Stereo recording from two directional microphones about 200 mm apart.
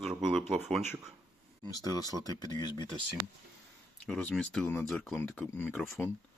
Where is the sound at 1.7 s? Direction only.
20° left (ahead or behind).